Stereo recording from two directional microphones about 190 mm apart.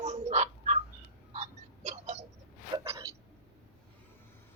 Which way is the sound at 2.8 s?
15° right (ahead or behind).